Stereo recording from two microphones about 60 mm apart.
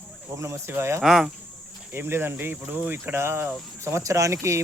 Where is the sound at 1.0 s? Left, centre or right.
Centre.